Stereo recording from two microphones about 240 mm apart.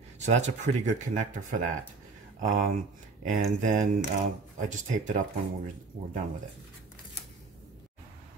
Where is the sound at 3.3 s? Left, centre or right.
Right.